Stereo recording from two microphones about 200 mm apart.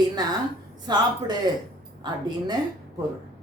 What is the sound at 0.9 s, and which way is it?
Speech, 20° right (ahead or behind).